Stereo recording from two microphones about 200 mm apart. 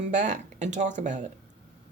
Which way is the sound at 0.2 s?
35° right (ahead or behind).